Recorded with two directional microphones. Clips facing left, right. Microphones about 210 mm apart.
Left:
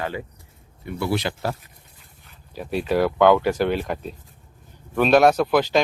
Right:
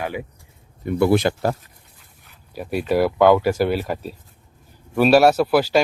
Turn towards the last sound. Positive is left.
turn(degrees=-5)  # may be behind; listen again after turning